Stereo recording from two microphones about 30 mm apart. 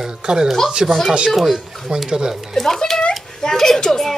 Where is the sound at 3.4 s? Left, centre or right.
Centre.